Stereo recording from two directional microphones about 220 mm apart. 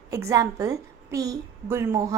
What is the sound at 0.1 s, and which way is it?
A woman's voice, 15° right (ahead or behind).